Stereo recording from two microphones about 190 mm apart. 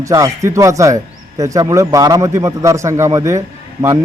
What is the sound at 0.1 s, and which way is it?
A man's voice, 15° right (ahead or behind).